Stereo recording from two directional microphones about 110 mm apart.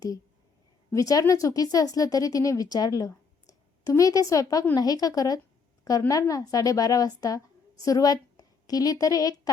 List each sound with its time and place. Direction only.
0.9 s a woman's voice: 30° left (ahead or behind)